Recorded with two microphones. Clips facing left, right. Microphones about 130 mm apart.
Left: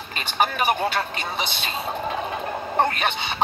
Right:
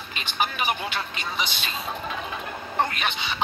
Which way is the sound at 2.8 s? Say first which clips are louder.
Left 4 dB; 40° left (ahead or behind).